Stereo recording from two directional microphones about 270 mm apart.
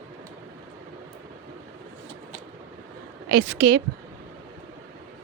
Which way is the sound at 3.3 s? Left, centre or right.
Right.